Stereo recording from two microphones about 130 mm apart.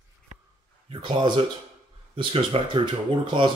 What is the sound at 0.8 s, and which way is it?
Speech, 35° right (ahead or behind).